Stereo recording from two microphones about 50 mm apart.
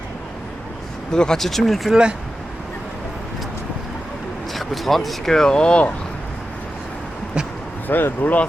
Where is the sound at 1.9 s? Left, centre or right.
Centre.